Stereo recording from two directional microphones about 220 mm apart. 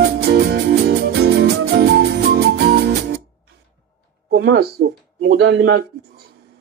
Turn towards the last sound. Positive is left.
turn(degrees=-50)  # may be behind; listen again after turning